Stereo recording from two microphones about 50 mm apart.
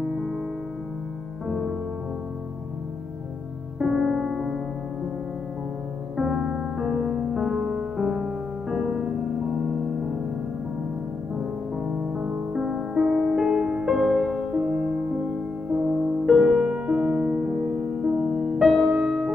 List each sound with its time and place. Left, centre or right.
1.5 s music: centre
3.8 s music: centre
6.1 s music: centre
11.3 s music: centre
18.6 s music: centre